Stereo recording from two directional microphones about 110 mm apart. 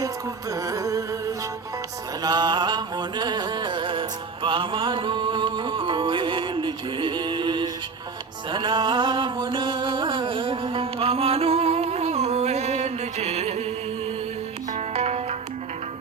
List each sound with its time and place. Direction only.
0.5 s music: 30° right (ahead or behind)
2.2 s music: 40° right (ahead or behind); by 13.7 s 90° right
14.8 s music: 85° right